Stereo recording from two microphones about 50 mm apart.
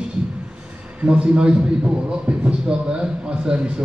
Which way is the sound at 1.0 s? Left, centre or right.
Right.